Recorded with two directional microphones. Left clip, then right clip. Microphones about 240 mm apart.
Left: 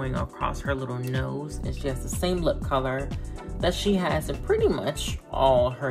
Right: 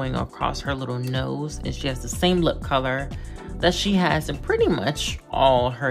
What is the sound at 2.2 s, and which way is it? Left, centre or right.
Speech, right.